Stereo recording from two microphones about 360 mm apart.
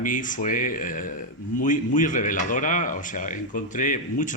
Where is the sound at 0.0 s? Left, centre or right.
Left.